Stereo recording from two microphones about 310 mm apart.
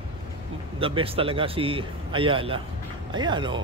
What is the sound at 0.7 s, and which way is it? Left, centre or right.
Speech, centre.